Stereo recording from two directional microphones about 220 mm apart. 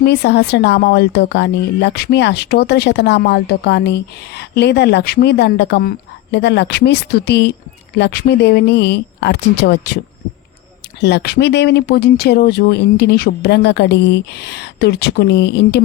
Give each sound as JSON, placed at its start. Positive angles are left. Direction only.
{"t": 0.0, "sound": "speech", "side_deg": 50}
{"t": 11.0, "sound": "speech", "side_deg": 50}